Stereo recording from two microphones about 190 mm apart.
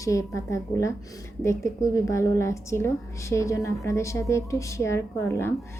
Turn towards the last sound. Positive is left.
turn(degrees=15)  # may be behind; listen again after turning